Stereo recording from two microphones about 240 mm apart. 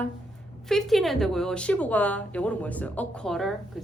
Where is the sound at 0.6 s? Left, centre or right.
Centre.